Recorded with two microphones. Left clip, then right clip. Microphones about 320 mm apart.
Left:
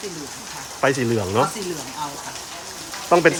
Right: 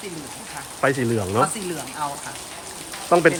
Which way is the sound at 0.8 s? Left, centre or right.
Centre.